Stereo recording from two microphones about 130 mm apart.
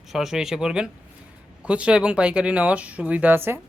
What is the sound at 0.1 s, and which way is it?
Speech, 5° right (ahead or behind).